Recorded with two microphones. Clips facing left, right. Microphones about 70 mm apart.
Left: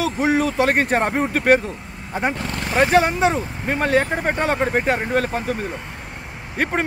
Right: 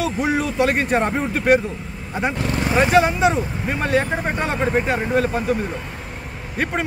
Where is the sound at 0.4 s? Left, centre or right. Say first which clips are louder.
Left 1 dB; left.